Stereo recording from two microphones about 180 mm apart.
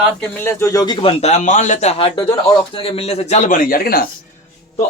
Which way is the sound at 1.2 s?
40° left (ahead or behind).